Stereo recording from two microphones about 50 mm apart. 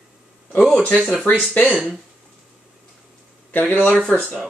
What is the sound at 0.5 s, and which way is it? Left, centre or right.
Speech, left.